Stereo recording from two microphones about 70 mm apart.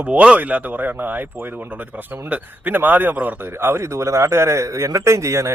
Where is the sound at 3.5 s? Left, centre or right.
Right.